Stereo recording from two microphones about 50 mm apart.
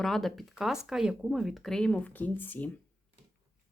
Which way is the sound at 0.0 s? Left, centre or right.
Centre.